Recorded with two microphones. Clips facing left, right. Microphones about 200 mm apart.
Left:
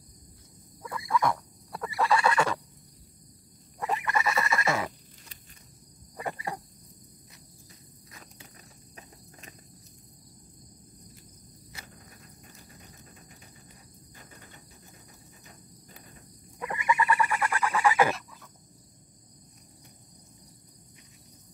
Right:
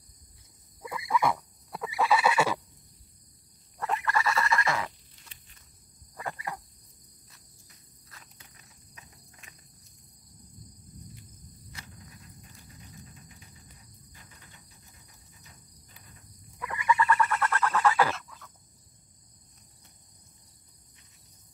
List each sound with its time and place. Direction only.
0.8 s neigh: 5° right (ahead or behind)
3.8 s fowl: 15° left (ahead or behind)
6.1 s cricket: 20° left (ahead or behind)
8.4 s cricket: 35° left (ahead or behind)
16.5 s a sound: 20° left (ahead or behind)